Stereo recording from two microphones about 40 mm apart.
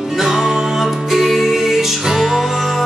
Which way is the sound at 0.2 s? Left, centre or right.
Centre.